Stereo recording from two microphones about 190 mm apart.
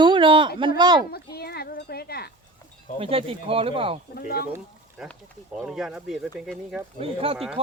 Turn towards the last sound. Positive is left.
turn(degrees=-30)  # may be behind; listen again after turning